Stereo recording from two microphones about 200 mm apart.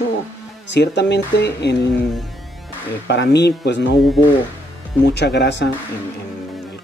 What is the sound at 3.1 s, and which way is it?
Speech, 60° left (ahead or behind).